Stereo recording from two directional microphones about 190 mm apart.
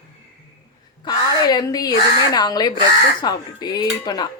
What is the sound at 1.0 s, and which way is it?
Speech, 20° left (ahead or behind).